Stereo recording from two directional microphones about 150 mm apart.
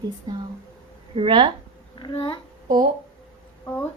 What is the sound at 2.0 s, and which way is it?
Speech, 35° left (ahead or behind).